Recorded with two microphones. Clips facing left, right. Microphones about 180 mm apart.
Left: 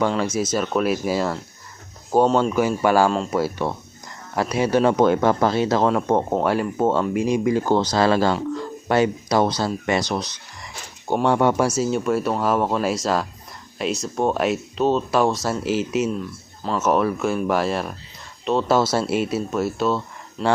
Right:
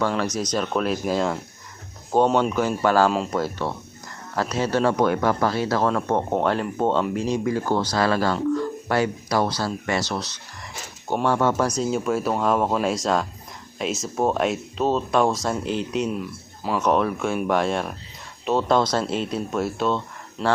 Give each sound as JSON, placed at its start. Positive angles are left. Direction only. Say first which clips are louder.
{"t": 0.2, "sound": "speech", "louder": "left 2 dB", "side_deg": 5}
{"t": 2.6, "sound": "speech", "louder": "left 2 dB", "side_deg": 10}